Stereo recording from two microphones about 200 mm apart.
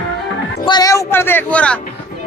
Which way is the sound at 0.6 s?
20° left (ahead or behind).